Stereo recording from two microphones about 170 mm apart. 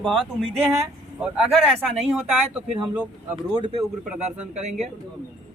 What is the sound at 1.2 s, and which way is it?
Speech, 5° right (ahead or behind).